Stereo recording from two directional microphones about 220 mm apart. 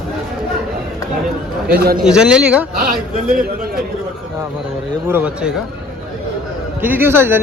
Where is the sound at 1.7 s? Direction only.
45° right (ahead or behind).